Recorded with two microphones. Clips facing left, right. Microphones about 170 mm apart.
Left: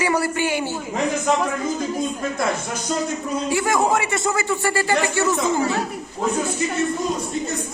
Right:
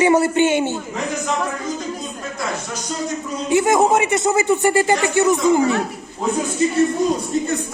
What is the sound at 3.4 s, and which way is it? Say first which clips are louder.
Speech: right 6 dB; 20° right (ahead or behind).